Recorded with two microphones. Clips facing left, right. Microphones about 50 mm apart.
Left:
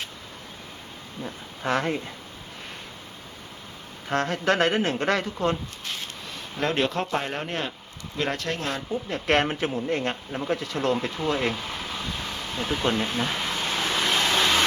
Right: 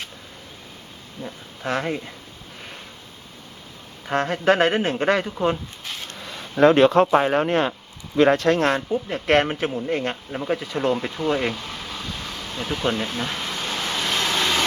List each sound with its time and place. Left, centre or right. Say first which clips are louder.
1.2 s speech: right 1 dB; centre
4.1 s speech: right 4 dB; centre
5.8 s a sound: even; centre
6.7 s speech: right 10 dB; right
8.9 s speech: right 4 dB; centre
9.2 s speech: right 3 dB; centre
11.5 s air conditioning: even; centre
13.1 s vehicle: even; centre